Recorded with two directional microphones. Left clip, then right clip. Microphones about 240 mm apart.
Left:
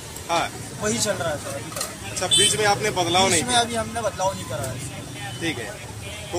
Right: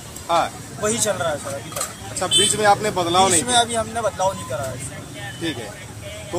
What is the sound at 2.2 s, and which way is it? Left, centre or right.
Speech, right.